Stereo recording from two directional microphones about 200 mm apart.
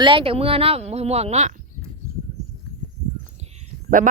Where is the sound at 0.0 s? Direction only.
25° right (ahead or behind).